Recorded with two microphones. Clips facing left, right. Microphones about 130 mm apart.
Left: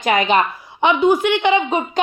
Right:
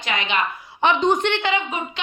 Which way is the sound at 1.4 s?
20° left (ahead or behind).